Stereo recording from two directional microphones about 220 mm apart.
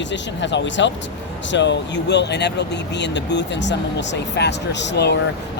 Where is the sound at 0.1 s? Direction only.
55° left (ahead or behind).